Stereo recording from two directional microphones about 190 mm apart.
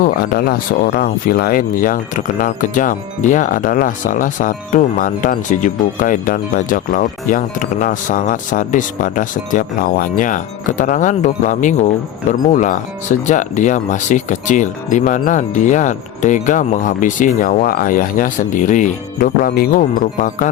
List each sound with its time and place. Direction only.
0.0 s speech: 50° left (ahead or behind)